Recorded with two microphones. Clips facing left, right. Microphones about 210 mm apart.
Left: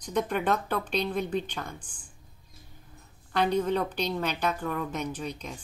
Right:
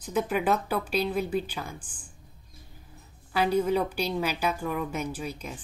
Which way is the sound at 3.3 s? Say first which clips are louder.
Right 1 dB; 5° right (ahead or behind).